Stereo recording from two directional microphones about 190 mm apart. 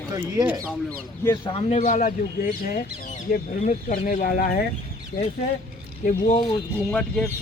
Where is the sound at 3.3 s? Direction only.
40° left (ahead or behind).